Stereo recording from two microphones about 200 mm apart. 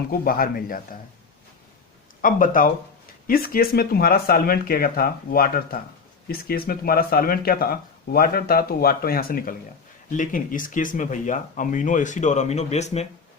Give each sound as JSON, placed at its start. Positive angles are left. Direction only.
{"t": 0.1, "sound": "speech", "side_deg": 45}
{"t": 2.2, "sound": "speech", "side_deg": 45}